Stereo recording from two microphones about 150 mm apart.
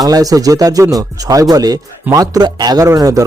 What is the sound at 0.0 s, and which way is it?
Speech, 25° right (ahead or behind).